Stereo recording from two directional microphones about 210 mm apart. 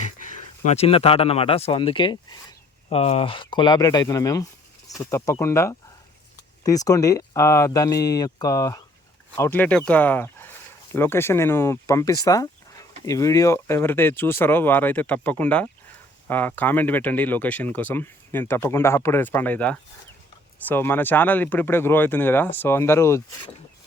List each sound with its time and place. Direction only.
0.0 s speech: 35° left (ahead or behind); by 23.2 s 15° left (ahead or behind)